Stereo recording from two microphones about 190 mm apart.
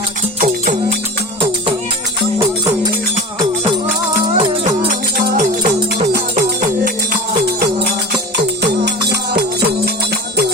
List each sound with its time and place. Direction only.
0.4 s music: 35° right (ahead or behind)
4.4 s music: 30° right (ahead or behind)
6.3 s music: 45° right (ahead or behind)
8.6 s music: 60° right (ahead or behind)